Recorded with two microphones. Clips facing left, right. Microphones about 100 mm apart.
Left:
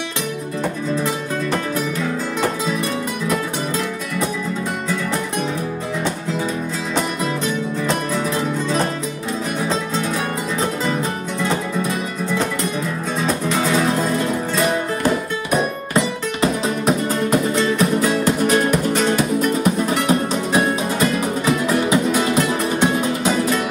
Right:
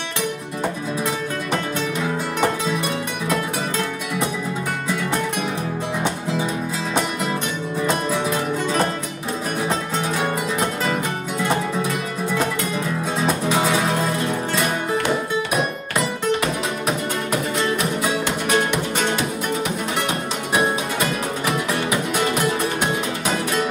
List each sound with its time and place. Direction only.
16.3 s music: 30° left (ahead or behind)